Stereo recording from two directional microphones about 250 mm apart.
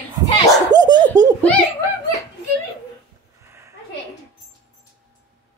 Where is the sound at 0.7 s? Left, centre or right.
Centre.